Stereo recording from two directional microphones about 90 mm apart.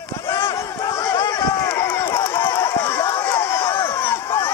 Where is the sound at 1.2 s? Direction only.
35° left (ahead or behind).